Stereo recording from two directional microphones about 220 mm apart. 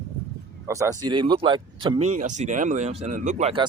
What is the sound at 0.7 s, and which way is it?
Speech, 15° right (ahead or behind).